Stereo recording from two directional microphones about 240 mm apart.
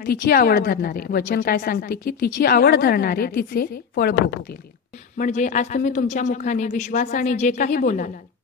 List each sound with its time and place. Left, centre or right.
0.3 s speech: left